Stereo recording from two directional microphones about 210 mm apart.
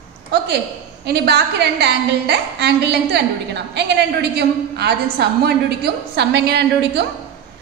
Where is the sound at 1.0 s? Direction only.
50° right (ahead or behind).